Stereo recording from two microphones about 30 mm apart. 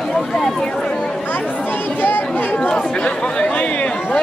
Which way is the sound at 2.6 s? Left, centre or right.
Left.